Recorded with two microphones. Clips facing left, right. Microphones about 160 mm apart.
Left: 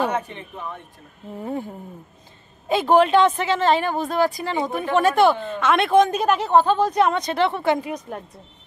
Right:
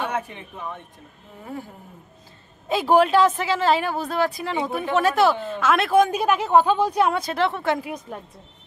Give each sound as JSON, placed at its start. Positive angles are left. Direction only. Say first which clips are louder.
{"t": 0.1, "sound": "speech", "louder": "left 2 dB", "side_deg": -10}
{"t": 1.4, "sound": "a sound", "louder": "left 6 dB", "side_deg": 25}
{"t": 2.7, "sound": "a woman's voice", "louder": "left 1 dB", "side_deg": -5}